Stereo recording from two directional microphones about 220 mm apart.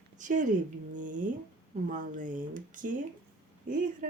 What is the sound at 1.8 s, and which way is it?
Speech, 35° right (ahead or behind).